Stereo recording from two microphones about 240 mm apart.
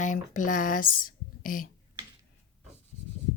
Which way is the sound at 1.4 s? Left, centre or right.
Left.